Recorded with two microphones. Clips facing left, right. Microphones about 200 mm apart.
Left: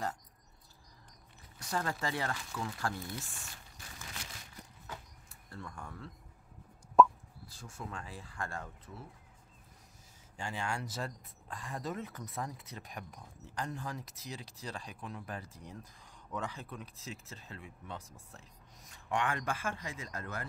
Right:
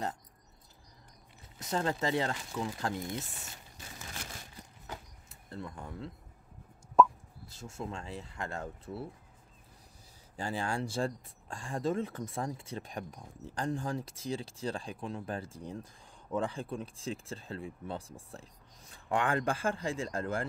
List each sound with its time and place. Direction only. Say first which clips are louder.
1.6 s speech: right 4 dB; 25° right (ahead or behind)
4.8 s sliding door: right 3 dB; 20° right (ahead or behind)
7.0 s plop: even; centre (ahead or behind)
7.4 s speech: right 5 dB; 25° right (ahead or behind)
10.3 s speech: right 4 dB; 35° right (ahead or behind)